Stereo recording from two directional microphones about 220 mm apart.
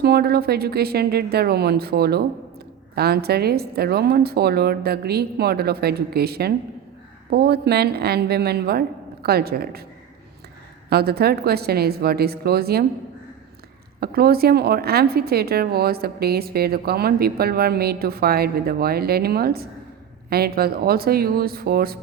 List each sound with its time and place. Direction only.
0.0 s a woman's voice: 45° right (ahead or behind)
10.8 s a woman's voice: 45° right (ahead or behind)
14.0 s a woman's voice: 45° right (ahead or behind)